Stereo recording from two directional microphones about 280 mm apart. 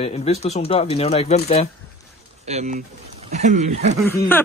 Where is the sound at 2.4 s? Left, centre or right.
Right.